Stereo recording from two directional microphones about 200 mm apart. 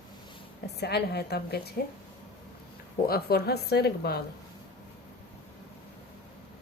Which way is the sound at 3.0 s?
50° left (ahead or behind).